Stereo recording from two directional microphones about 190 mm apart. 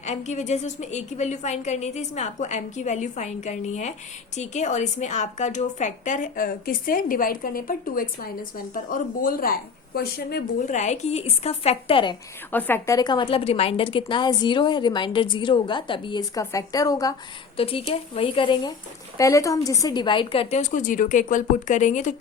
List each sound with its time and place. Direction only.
0.0 s a woman's voice: 35° left (ahead or behind); by 10.4 s 55° left (ahead or behind)
10.6 s a woman's voice: 40° left (ahead or behind)
12.5 s a woman's voice: 10° left (ahead or behind)
17.6 s a woman's voice: 30° left (ahead or behind)